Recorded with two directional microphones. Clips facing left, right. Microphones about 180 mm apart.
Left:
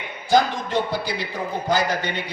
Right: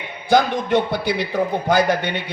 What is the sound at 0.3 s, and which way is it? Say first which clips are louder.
A man's voice: right 3 dB; 60° right (ahead or behind).